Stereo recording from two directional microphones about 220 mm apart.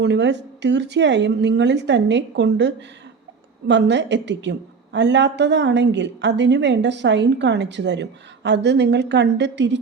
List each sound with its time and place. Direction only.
0.0 s a woman's voice: 50° right (ahead or behind)